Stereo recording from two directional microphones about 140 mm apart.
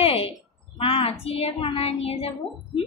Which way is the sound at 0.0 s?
45° left (ahead or behind).